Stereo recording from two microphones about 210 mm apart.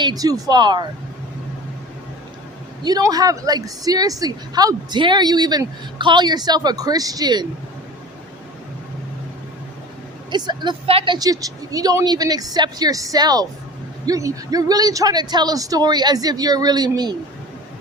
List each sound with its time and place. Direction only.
0.0 s a woman's voice: 20° right (ahead or behind)
2.8 s a woman's voice: 20° right (ahead or behind)
10.3 s a woman's voice: 20° right (ahead or behind)